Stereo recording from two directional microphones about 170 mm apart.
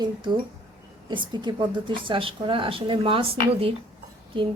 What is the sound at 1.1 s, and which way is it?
A woman's voice, 25° right (ahead or behind).